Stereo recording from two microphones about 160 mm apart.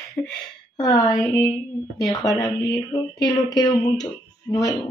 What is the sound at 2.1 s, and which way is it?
Speech, 20° left (ahead or behind).